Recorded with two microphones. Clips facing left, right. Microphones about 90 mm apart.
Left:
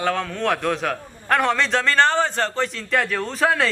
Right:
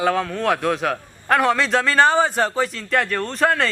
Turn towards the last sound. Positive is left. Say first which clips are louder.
# right 1 dB
turn(degrees=0)  # may be behind; listen again after turning